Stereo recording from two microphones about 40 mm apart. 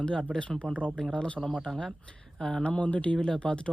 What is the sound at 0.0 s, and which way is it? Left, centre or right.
Speech, left.